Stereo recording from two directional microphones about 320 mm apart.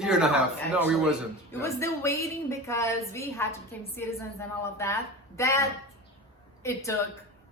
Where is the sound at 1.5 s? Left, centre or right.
Centre.